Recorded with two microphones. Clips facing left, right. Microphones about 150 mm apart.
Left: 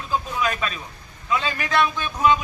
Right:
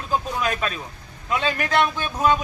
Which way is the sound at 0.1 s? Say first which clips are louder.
Right 1 dB; 40° right (ahead or behind).